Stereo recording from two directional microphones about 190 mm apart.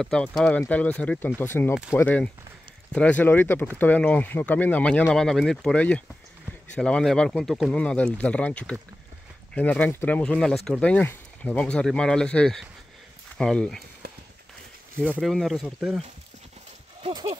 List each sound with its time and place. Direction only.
0.0 s speech: 5° left (ahead or behind)
15.0 s speech: centre (ahead or behind)
17.0 s speech: 25° right (ahead or behind)